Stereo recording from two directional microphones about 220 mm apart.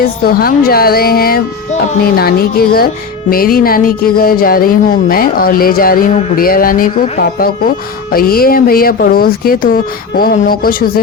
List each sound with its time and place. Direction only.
0.0 s a woman's voice: 45° left (ahead or behind)